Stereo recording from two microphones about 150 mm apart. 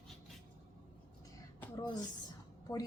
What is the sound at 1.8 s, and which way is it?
Speech, 25° left (ahead or behind).